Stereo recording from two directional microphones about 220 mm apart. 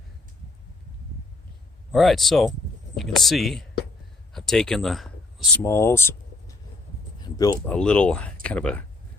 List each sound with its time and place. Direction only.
1.9 s speech: centre (ahead or behind)
5.6 s speech: 10° left (ahead or behind)
7.3 s a sound: 15° left (ahead or behind)
7.7 s speech: 5° left (ahead or behind)